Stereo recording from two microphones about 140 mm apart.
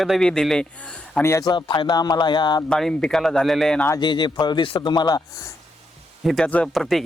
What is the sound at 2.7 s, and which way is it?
Speech, 5° left (ahead or behind).